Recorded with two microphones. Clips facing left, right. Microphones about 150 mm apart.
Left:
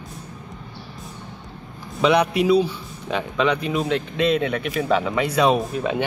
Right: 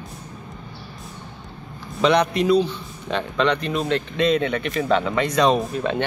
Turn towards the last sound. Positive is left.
turn(degrees=5)  # may be behind; listen again after turning